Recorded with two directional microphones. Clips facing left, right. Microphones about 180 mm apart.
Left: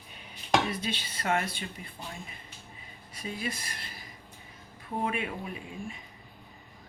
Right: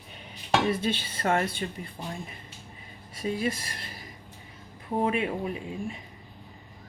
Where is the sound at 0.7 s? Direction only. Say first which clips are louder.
Right 6 dB; 55° right (ahead or behind).